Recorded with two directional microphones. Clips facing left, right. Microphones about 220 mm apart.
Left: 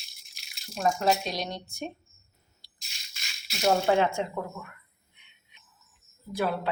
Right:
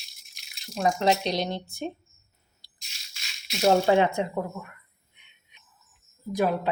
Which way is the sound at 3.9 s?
20° right (ahead or behind).